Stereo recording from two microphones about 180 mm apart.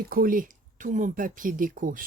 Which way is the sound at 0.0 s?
55° right (ahead or behind).